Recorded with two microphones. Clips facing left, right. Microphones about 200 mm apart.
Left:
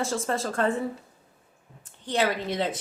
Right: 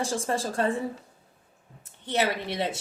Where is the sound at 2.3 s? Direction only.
15° left (ahead or behind).